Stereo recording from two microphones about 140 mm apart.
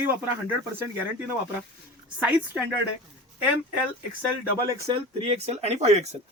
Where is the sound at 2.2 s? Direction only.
10° right (ahead or behind).